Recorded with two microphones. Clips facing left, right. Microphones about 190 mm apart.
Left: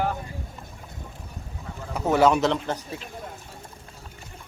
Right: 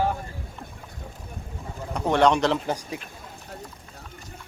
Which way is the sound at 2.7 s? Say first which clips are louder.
Right 1 dB; 15° right (ahead or behind).